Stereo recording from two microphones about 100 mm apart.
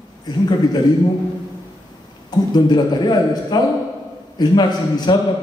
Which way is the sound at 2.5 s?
45° left (ahead or behind).